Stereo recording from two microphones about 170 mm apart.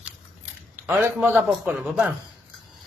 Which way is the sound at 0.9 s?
15° right (ahead or behind).